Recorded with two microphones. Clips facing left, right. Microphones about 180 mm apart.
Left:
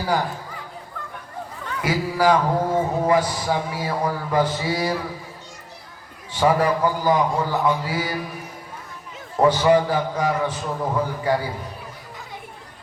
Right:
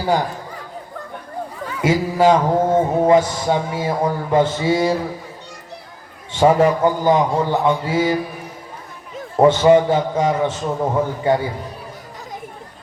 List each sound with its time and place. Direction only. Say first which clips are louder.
1.8 s a man's voice: right 5 dB; 25° right (ahead or behind)
6.3 s a man's voice: right 5 dB; 25° right (ahead or behind)
9.4 s a man's voice: right 5 dB; 25° right (ahead or behind)